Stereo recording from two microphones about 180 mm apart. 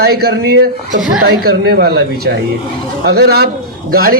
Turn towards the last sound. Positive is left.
turn(degrees=-55)  # may be behind; listen again after turning